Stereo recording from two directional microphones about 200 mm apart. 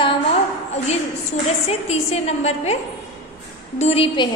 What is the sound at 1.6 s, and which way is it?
A woman's voice, 30° left (ahead or behind).